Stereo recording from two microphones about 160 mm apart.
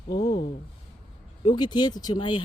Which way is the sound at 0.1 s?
90° left.